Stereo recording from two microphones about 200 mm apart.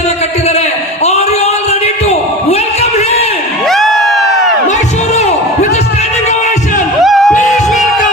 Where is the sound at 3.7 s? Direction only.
Centre (ahead or behind).